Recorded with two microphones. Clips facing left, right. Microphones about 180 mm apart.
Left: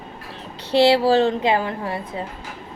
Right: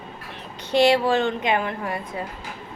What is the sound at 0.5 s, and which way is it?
A woman's voice, 30° left (ahead or behind).